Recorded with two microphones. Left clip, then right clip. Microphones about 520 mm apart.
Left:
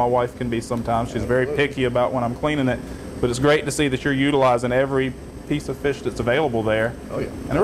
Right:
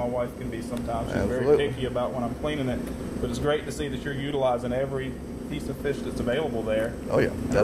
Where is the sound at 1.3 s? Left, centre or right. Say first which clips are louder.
Left 3 dB; left.